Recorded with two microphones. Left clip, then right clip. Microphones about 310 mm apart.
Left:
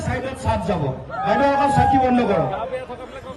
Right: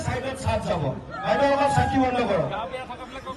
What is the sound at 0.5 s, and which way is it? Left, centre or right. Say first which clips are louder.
Chatter: left 3 dB; right.